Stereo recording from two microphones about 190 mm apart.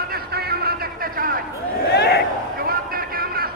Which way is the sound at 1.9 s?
60° left (ahead or behind).